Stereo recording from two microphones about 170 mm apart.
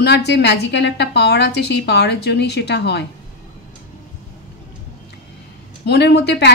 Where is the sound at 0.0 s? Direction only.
85° left.